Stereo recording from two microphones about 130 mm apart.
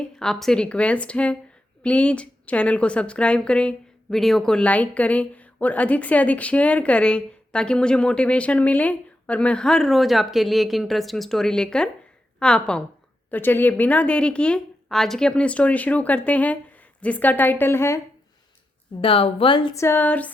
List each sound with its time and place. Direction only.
0.0 s a woman's voice: 5° left (ahead or behind); by 18.0 s 20° left (ahead or behind)
19.0 s a woman's voice: 45° left (ahead or behind)
19.7 s a woman's voice: 20° left (ahead or behind)